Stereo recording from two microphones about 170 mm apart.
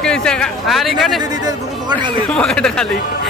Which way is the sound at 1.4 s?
25° right (ahead or behind).